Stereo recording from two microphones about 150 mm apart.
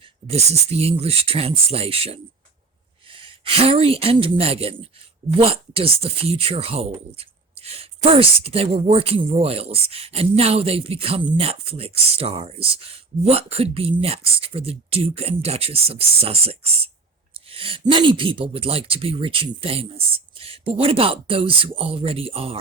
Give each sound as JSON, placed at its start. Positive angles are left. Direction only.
{"t": 0.3, "sound": "speech", "side_deg": -45}